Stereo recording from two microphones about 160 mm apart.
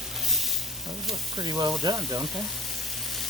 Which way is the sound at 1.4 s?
30° right (ahead or behind).